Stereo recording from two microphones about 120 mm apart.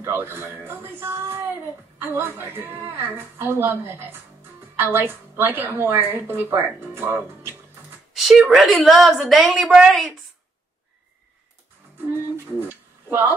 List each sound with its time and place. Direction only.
0.0 s a woman's voice: 20° right (ahead or behind)
8.1 s a woman's voice: centre (ahead or behind)
12.1 s speech: 20° right (ahead or behind)